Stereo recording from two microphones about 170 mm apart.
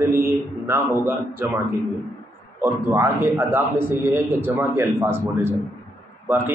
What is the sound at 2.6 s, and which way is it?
A man's voice, 15° right (ahead or behind).